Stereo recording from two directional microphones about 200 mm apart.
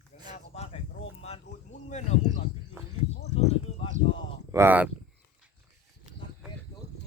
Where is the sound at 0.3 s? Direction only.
30° left (ahead or behind).